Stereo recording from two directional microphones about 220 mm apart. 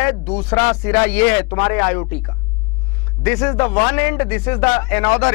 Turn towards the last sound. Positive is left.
turn(degrees=10)  # may be behind; listen again after turning